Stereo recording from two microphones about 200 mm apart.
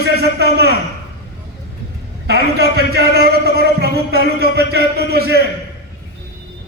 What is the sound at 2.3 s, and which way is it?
A man's voice, 55° right (ahead or behind).